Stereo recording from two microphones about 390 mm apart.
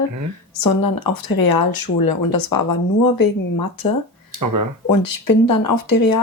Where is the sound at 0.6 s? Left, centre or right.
Left.